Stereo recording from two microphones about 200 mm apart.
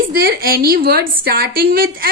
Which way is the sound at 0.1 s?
50° right (ahead or behind).